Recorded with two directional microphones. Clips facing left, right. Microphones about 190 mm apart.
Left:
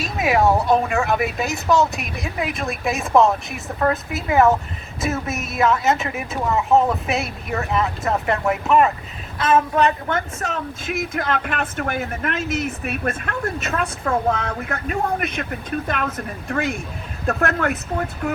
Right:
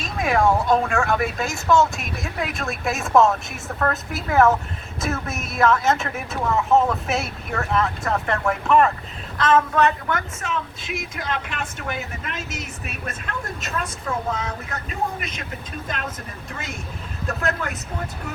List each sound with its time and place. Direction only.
0.0 s speech: 5° left (ahead or behind)
9.7 s a woman's voice: 15° left (ahead or behind)
10.4 s speech: 40° left (ahead or behind)
11.1 s speech: 55° left (ahead or behind)